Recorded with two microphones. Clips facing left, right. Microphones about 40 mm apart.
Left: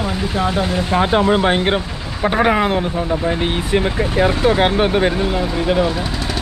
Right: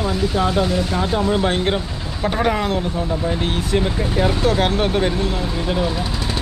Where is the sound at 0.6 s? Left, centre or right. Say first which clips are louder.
Left 3 dB; left.